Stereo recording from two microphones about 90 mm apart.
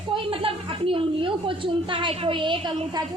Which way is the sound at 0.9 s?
75° right (ahead or behind).